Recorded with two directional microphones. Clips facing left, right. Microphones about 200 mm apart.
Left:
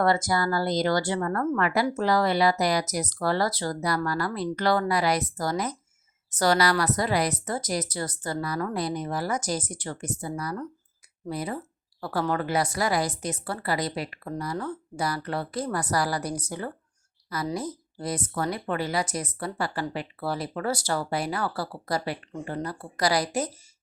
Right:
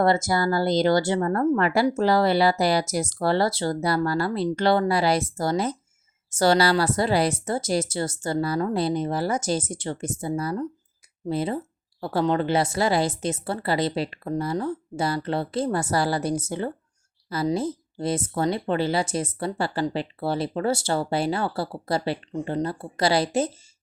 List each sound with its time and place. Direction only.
0.0 s speech: 25° right (ahead or behind)